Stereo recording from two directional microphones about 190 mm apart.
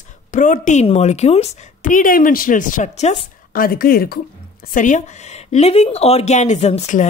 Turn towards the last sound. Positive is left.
turn(degrees=35)  # may be behind; listen again after turning